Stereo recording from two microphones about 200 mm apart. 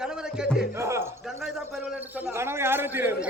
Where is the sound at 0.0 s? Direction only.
5° right (ahead or behind).